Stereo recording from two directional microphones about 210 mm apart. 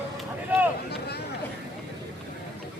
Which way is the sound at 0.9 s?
50° left (ahead or behind).